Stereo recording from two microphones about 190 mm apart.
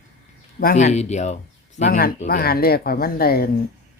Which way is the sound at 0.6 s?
40° left (ahead or behind).